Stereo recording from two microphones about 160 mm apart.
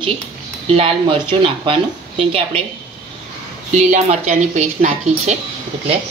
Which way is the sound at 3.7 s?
50° right (ahead or behind).